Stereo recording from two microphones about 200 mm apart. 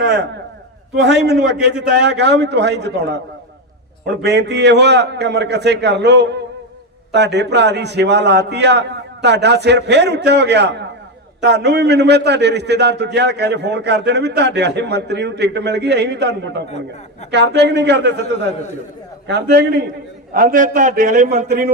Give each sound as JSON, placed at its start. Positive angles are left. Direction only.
{"t": 1.0, "sound": "a man's voice", "side_deg": -60}
{"t": 4.2, "sound": "a man's voice", "side_deg": -60}
{"t": 19.3, "sound": "a man's voice", "side_deg": -55}